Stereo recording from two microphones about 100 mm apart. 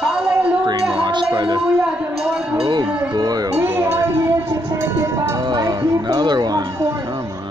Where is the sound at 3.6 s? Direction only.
30° right (ahead or behind).